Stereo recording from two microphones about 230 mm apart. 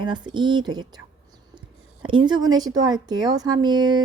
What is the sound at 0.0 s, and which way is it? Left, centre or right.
A woman's voice, centre.